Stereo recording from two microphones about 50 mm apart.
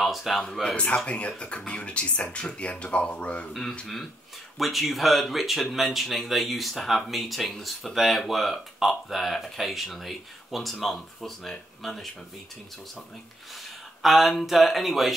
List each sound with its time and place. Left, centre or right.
0.0 s speech: centre
0.7 s speech: left
3.8 s speech: centre
14.0 s speech: centre